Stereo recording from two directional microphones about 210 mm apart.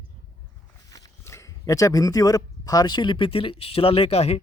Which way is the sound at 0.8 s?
15° left (ahead or behind).